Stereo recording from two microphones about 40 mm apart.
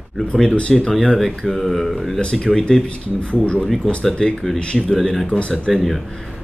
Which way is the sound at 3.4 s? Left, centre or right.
Left.